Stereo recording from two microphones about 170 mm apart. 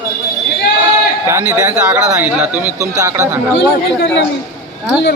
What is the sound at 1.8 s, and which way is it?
Speech, 10° right (ahead or behind).